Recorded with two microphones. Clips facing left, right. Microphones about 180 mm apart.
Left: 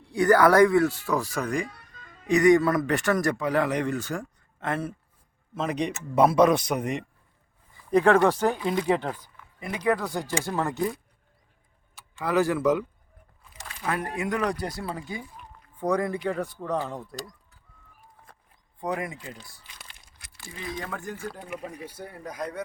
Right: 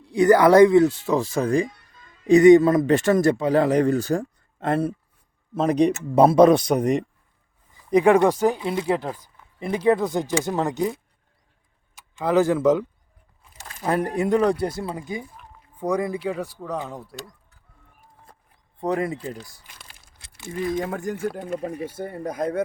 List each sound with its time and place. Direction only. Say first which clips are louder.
0.1 s speech: right 4 dB; 20° right (ahead or behind); by 7.0 s 35° right (ahead or behind)
7.9 s speech: right 3 dB; 15° right (ahead or behind)
9.6 s speech: right 6 dB; 30° right (ahead or behind)
13.7 s speech: right 7 dB; 40° right (ahead or behind); by 17.2 s 5° right (ahead or behind)
18.8 s speech: right 6 dB; 30° right (ahead or behind)
20.1 s crumpling: right 7 dB; 25° right (ahead or behind)
20.9 s speech: right 8 dB; 45° right (ahead or behind)